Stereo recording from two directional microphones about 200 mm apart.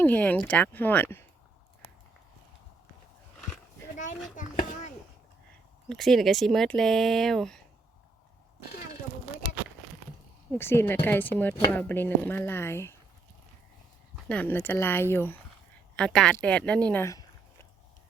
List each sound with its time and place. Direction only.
0.0 s speech: 10° left (ahead or behind)
3.9 s a sound: 40° left (ahead or behind)
5.9 s speech: centre (ahead or behind)
10.6 s speech: 10° left (ahead or behind)
14.3 s speech: 10° left (ahead or behind)